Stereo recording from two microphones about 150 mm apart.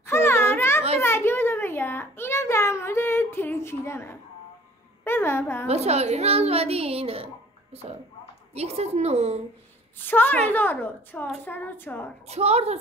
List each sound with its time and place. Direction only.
0.0 s children playing: 15° left (ahead or behind)
1.0 s a sound: 15° left (ahead or behind)
5.0 s a woman's voice: 15° left (ahead or behind)
5.7 s a woman's voice: 45° right (ahead or behind)
9.9 s a woman's voice: 15° left (ahead or behind)
12.3 s a woman's voice: 45° right (ahead or behind)